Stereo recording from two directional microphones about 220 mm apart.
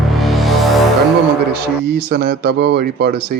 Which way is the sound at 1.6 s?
45° right (ahead or behind).